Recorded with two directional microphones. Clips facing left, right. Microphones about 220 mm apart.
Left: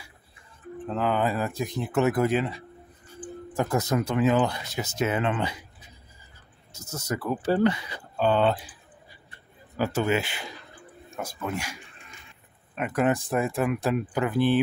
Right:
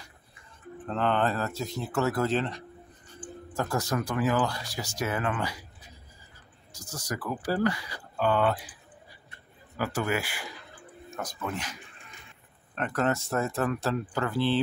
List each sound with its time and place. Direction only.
0.8 s speech: 5° left (ahead or behind); by 5.7 s 20° left (ahead or behind)
6.7 s speech: 25° left (ahead or behind)
9.8 s speech: 25° left (ahead or behind)
11.1 s speech: 10° left (ahead or behind)